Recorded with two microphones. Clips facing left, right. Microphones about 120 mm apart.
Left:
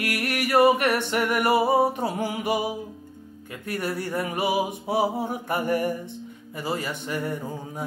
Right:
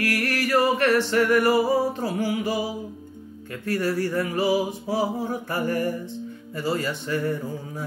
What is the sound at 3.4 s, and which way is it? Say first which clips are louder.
Music: right 4 dB; 15° left (ahead or behind).